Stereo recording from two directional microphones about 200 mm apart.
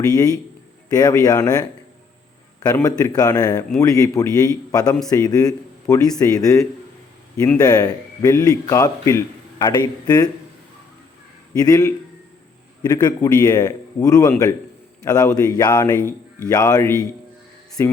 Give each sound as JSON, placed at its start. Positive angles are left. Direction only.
{"t": 0.9, "sound": "speech", "side_deg": 20}
{"t": 11.6, "sound": "speech", "side_deg": 15}